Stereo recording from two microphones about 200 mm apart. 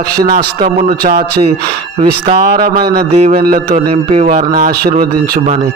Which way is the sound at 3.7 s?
25° right (ahead or behind).